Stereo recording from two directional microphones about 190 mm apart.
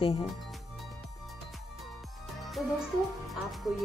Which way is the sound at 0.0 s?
30° left (ahead or behind).